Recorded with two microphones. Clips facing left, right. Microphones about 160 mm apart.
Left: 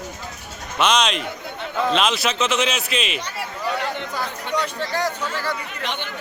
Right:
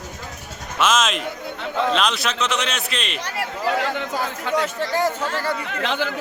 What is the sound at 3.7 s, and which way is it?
Speech, 90° right.